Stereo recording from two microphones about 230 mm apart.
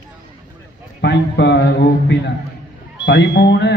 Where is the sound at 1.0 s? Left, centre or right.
Left.